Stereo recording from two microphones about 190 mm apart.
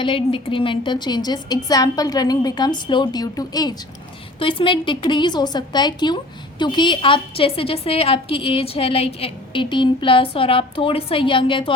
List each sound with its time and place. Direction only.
0.0 s a woman's voice: 25° left (ahead or behind)